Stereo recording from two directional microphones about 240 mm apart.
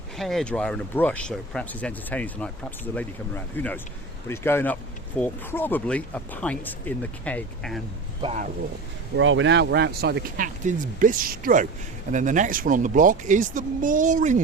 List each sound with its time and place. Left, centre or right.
0.2 s speech: centre
8.2 s speech: right
9.1 s speech: right